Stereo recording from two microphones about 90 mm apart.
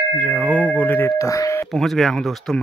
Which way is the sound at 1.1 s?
35° left (ahead or behind).